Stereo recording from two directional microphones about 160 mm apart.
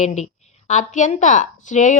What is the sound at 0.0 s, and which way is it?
A woman's voice, 45° left (ahead or behind).